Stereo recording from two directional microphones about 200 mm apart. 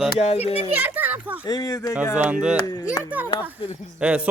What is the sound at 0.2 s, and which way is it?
Speech, 30° left (ahead or behind).